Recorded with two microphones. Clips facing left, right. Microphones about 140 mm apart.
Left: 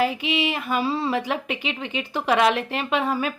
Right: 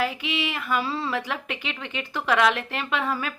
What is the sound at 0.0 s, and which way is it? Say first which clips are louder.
Speech: left 4 dB; 20° left (ahead or behind).